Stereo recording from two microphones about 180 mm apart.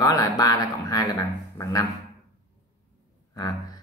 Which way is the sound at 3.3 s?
20° left (ahead or behind).